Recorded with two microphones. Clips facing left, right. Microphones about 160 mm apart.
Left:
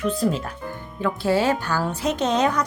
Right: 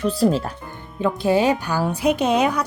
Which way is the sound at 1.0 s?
20° right (ahead or behind).